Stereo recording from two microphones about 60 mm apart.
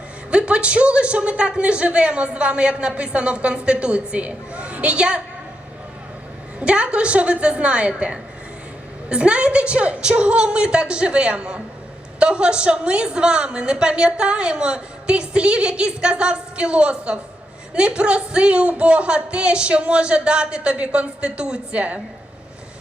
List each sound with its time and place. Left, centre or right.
0.3 s a man's voice: centre
6.6 s a man's voice: centre